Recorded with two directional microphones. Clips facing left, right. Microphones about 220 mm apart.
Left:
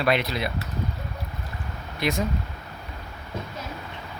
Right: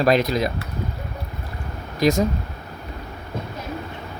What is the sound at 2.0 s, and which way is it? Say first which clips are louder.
Speech: right 8 dB; 40° right (ahead or behind).